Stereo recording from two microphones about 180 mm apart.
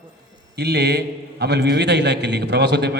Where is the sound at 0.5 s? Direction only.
65° right (ahead or behind).